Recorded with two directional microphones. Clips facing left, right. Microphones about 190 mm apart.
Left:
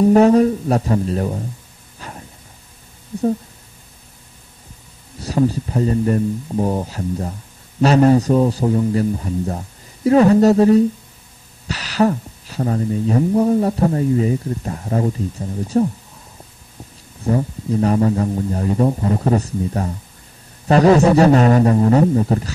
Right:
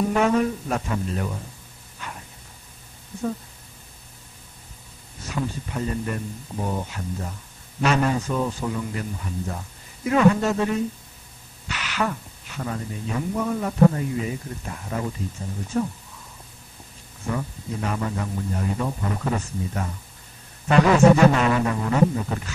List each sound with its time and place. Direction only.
0.1 s speech: 35° left (ahead or behind)
2.0 s a sound: 35° left (ahead or behind)
5.2 s speech: 35° left (ahead or behind)
17.2 s speech: 35° left (ahead or behind)